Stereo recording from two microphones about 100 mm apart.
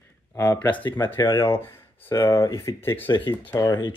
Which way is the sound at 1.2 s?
45° left (ahead or behind).